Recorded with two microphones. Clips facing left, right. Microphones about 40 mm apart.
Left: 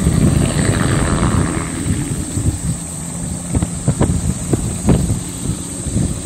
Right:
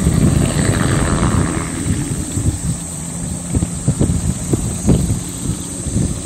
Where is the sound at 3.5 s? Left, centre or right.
Left.